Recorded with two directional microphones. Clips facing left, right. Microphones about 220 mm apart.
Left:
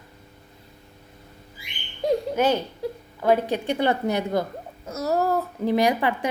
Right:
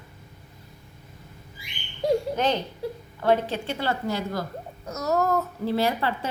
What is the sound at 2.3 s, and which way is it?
A woman's voice, 10° left (ahead or behind).